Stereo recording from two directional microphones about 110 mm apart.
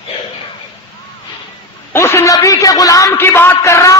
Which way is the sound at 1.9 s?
25° left (ahead or behind).